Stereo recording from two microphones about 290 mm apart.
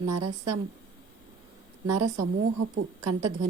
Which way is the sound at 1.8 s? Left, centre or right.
Right.